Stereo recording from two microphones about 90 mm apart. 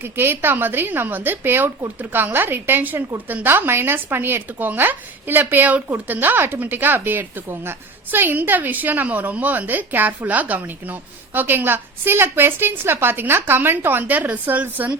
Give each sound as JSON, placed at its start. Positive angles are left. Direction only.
{"t": 0.0, "sound": "speech", "side_deg": -25}